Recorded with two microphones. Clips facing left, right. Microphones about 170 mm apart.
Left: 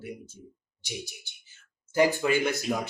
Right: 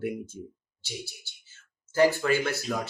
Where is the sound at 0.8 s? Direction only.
15° left (ahead or behind).